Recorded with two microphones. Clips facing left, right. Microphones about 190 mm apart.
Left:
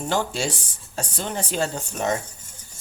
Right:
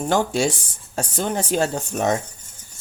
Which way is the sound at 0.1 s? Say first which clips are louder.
Right 5 dB; 50° right (ahead or behind).